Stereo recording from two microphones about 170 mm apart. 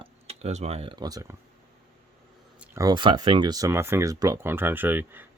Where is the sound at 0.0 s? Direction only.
40° right (ahead or behind); by 1.4 s 20° right (ahead or behind).